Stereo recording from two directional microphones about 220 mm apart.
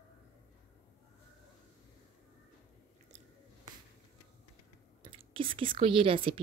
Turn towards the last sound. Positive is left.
turn(degrees=-25)  # may be behind; listen again after turning